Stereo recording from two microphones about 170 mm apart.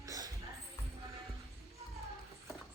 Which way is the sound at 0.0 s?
20° right (ahead or behind).